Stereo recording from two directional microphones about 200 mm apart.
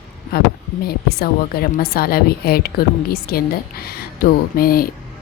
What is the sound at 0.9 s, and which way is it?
A woman's voice, 50° left (ahead or behind).